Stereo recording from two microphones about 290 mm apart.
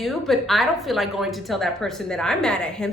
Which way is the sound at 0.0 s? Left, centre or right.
Centre.